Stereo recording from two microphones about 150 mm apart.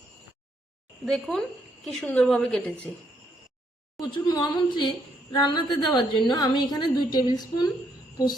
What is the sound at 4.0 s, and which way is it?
A woman's voice, 25° left (ahead or behind).